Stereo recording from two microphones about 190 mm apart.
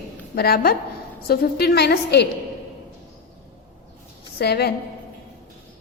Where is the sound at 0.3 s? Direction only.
55° left (ahead or behind).